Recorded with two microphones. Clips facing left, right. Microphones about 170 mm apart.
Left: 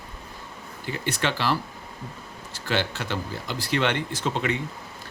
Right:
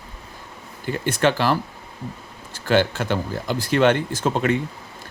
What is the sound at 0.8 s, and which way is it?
Speech, 50° right (ahead or behind).